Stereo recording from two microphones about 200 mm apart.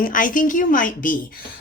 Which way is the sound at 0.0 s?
40° left (ahead or behind).